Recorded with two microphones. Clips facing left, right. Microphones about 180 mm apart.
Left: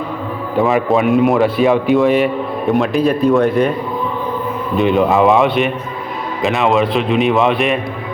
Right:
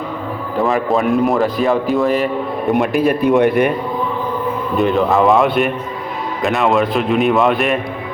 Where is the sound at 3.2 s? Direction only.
20° right (ahead or behind).